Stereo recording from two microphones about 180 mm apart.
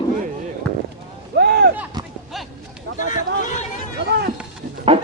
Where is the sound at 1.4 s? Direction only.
60° right (ahead or behind).